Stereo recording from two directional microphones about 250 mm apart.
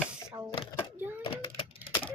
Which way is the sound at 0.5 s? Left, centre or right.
Left.